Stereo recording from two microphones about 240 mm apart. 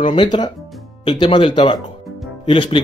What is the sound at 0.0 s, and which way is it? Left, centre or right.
Speech, centre.